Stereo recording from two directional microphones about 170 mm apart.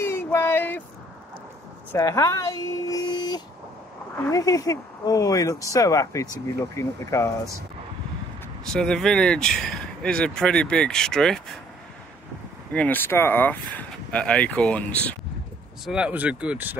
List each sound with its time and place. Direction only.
0.0 s a sound: 15° left (ahead or behind)
1.9 s a sound: 20° left (ahead or behind)
4.3 s speech: 20° left (ahead or behind)
8.7 s speech: 5° left (ahead or behind)
12.7 s speech: 10° left (ahead or behind)
15.8 s speech: 5° right (ahead or behind)